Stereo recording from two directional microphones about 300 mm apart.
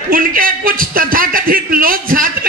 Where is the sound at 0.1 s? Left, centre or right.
Right.